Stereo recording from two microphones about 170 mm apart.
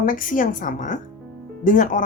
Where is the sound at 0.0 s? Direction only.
55° left (ahead or behind).